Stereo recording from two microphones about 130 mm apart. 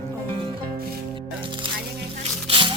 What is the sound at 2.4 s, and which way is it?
Music, 40° right (ahead or behind).